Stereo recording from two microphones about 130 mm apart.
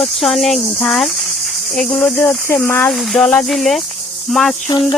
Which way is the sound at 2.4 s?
15° left (ahead or behind).